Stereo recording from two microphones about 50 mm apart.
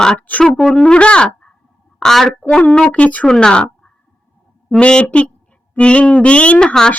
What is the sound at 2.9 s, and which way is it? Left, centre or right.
Speech, left.